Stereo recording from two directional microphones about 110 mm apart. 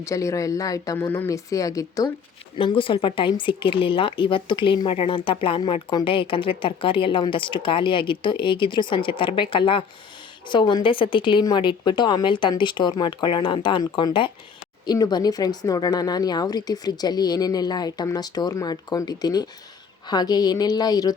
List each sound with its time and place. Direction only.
0.0 s a woman's voice: 30° left (ahead or behind)
0.9 s a woman's voice: 20° left (ahead or behind)
2.6 s speech: 55° left (ahead or behind)
14.8 s a woman's voice: 40° left (ahead or behind)